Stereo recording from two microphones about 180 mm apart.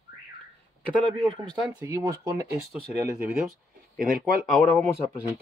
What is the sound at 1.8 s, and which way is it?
Speech, 15° right (ahead or behind).